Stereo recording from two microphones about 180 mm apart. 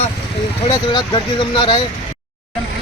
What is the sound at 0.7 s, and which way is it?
Speech, 25° left (ahead or behind).